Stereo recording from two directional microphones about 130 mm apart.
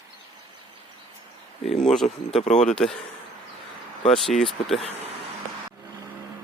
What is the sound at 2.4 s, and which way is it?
Speech, 65° left (ahead or behind).